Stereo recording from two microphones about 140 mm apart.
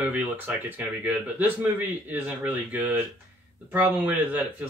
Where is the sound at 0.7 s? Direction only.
15° right (ahead or behind).